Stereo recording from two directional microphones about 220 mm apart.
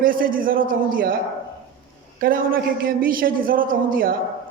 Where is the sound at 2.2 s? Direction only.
40° right (ahead or behind).